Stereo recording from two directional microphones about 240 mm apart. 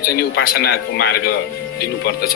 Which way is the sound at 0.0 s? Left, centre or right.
Left.